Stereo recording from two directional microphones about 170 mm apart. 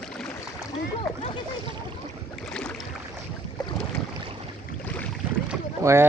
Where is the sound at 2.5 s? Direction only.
5° left (ahead or behind).